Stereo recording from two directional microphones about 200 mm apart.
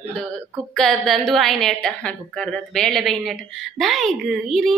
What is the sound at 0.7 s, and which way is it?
A woman's voice, centre (ahead or behind).